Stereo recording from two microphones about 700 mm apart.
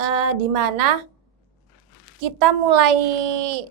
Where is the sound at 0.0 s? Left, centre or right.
Right.